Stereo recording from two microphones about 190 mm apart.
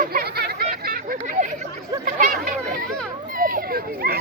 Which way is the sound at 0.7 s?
50° right (ahead or behind).